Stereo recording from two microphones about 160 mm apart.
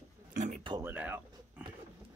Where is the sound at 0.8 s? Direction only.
10° right (ahead or behind).